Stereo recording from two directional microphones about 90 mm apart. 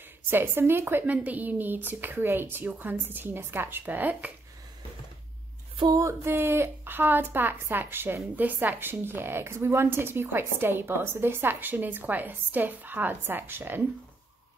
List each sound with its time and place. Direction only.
0.3 s a woman's voice: 25° right (ahead or behind)
5.9 s a woman's voice: 35° right (ahead or behind)